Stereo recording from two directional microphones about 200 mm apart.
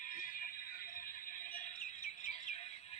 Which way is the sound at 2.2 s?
35° left (ahead or behind).